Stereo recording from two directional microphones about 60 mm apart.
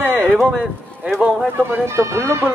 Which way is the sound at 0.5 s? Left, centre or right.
Centre.